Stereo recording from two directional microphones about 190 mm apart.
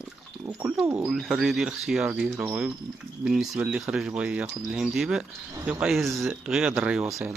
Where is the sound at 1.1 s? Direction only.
Centre (ahead or behind).